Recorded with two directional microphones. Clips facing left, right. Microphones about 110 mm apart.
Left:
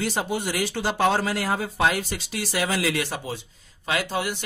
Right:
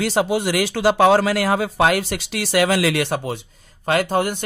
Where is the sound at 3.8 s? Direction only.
50° right (ahead or behind).